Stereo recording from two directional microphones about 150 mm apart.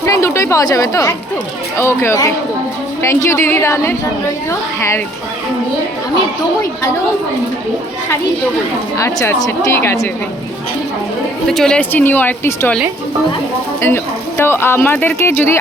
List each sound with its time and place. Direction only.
0.0 s a woman's voice: 20° left (ahead or behind)
9.0 s a woman's voice: 20° left (ahead or behind)
11.4 s speech: 5° left (ahead or behind)
13.8 s speech: 15° left (ahead or behind)